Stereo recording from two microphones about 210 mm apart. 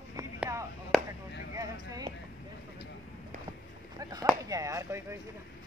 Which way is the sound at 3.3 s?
40° right (ahead or behind).